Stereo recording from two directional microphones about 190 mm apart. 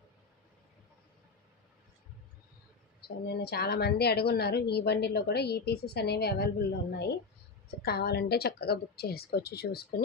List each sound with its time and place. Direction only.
3.3 s a woman's voice: 55° left (ahead or behind)